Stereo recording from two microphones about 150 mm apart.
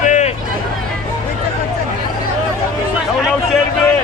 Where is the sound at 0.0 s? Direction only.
55° left (ahead or behind).